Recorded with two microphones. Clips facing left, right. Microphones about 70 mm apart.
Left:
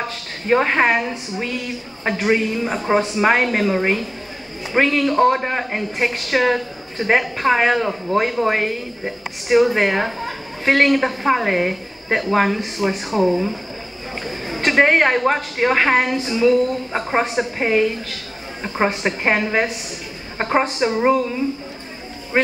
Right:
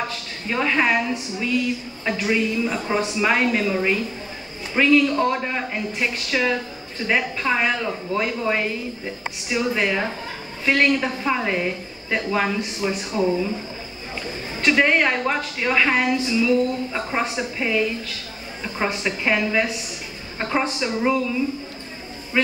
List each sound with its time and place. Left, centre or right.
0.5 s a woman's voice: left
14.6 s a woman's voice: left